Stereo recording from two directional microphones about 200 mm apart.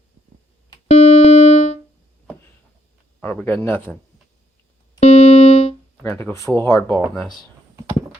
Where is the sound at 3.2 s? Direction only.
10° left (ahead or behind).